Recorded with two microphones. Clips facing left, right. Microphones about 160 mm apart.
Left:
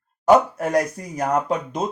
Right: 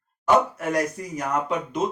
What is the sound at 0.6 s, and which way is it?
Speech, 40° left (ahead or behind).